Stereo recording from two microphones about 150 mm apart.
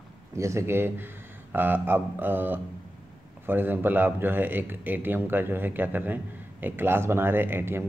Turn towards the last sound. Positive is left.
turn(degrees=-15)  # may be behind; listen again after turning